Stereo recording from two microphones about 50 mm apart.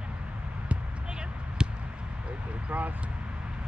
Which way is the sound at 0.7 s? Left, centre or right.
Centre.